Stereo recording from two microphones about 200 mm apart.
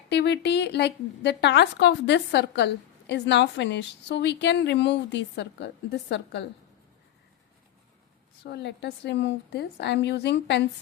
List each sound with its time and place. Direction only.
0.1 s a woman's voice: 60° left (ahead or behind)
8.4 s a woman's voice: 60° left (ahead or behind)